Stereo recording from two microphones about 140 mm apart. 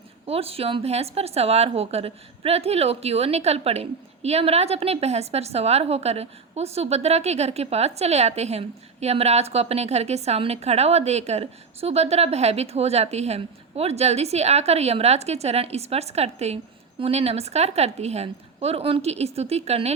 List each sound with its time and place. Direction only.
0.3 s speech: 45° right (ahead or behind)